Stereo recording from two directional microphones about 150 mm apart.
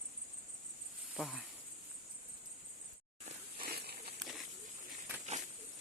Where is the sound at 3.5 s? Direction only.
85° right.